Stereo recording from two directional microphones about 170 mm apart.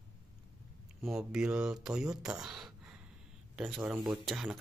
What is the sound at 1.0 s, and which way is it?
Speech, 5° right (ahead or behind).